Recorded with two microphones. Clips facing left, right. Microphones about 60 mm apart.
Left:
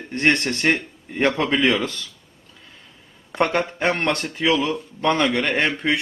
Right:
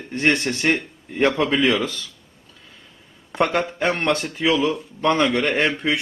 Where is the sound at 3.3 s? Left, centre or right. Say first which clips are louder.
Even; centre.